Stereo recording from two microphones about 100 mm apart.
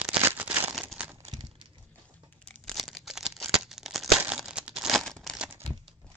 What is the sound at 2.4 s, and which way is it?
Tearing, 5° left (ahead or behind).